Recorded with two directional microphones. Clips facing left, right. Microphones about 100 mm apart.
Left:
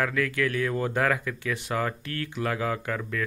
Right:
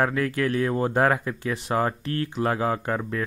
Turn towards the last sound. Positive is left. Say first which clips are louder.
# right 4 dB
turn(degrees=-30)  # may be behind; listen again after turning